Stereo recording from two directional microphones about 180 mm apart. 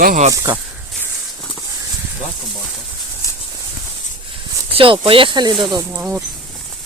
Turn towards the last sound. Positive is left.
turn(degrees=-10)  # may be behind; listen again after turning